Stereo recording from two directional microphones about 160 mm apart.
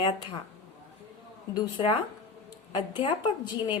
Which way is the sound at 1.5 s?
35° left (ahead or behind).